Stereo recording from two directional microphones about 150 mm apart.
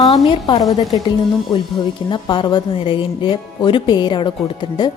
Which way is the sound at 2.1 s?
30° left (ahead or behind).